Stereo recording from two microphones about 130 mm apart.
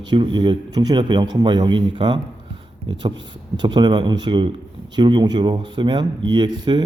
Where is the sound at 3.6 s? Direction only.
35° right (ahead or behind).